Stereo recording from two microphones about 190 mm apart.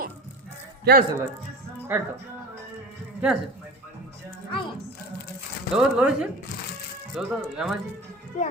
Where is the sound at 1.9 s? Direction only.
10° right (ahead or behind).